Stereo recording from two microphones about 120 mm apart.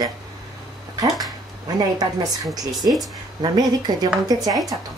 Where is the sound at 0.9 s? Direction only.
30° right (ahead or behind).